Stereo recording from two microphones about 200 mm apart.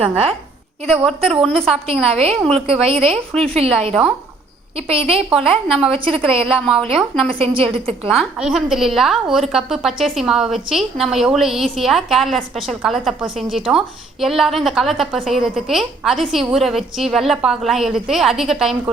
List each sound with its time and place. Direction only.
0.9 s a woman's voice: centre (ahead or behind)
2.0 s a woman's voice: 30° right (ahead or behind)
2.3 s a woman's voice: centre (ahead or behind)
2.8 s a woman's voice: 30° right (ahead or behind)
5.3 s a woman's voice: 5° right (ahead or behind)
5.9 s a woman's voice: 30° right (ahead or behind)
6.5 s a woman's voice: 5° right (ahead or behind)
7.3 s a woman's voice: 25° right (ahead or behind)
8.0 s a woman's voice: centre (ahead or behind)